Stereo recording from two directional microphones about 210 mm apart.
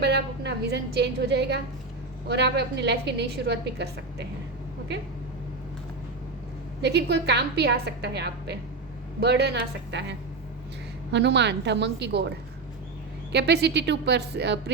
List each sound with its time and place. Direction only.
0.0 s a woman's voice: 50° right (ahead or behind)
6.8 s a woman's voice: 55° right (ahead or behind)
13.3 s a woman's voice: 50° right (ahead or behind)